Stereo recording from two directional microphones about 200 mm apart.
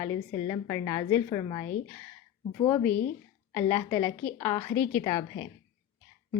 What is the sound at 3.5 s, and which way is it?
A woman's voice, 10° left (ahead or behind).